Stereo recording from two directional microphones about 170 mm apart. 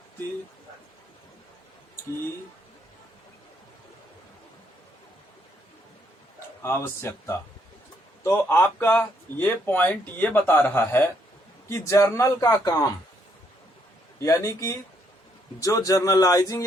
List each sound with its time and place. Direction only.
6.6 s a man's voice: 15° left (ahead or behind)
14.2 s a man's voice: 15° left (ahead or behind)